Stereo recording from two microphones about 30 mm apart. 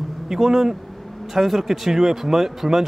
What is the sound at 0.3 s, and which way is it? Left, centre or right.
Speech, centre.